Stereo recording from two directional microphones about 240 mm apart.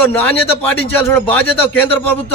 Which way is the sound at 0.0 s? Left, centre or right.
Centre.